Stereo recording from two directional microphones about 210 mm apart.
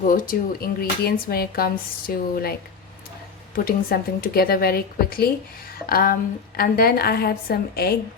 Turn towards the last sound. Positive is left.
turn(degrees=45)  # may be behind; listen again after turning